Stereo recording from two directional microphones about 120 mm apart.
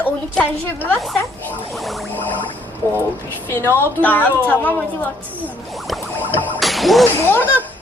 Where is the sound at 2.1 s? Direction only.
15° left (ahead or behind).